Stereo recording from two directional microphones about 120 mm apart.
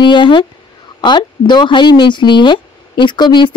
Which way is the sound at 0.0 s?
40° left (ahead or behind).